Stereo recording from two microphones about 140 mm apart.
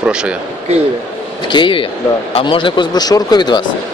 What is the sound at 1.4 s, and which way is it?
A man's voice, 35° left (ahead or behind).